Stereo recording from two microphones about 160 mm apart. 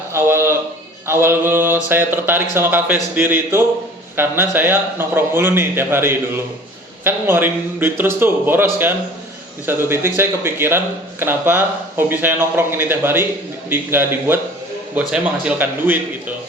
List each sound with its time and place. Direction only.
0.1 s a man's voice: 15° right (ahead or behind)